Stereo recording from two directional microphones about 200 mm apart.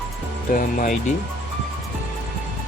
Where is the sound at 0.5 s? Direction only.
40° left (ahead or behind).